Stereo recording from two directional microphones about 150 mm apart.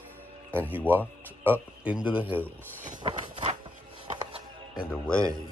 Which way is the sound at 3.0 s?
45° right (ahead or behind).